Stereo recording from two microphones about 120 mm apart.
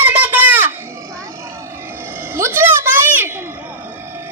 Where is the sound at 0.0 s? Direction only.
15° right (ahead or behind).